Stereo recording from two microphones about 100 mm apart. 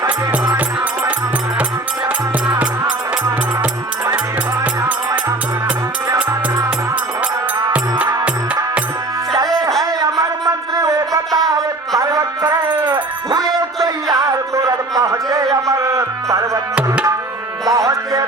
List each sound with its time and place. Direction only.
0.3 s music: 15° right (ahead or behind)
7.7 s music: 15° right (ahead or behind)
10.0 s a sound: 35° right (ahead or behind)
11.3 s music: centre (ahead or behind)
11.9 s music: 35° right (ahead or behind)
13.8 s music: 35° right (ahead or behind)
16.7 s tabla: 15° right (ahead or behind)
17.7 s music: 35° right (ahead or behind)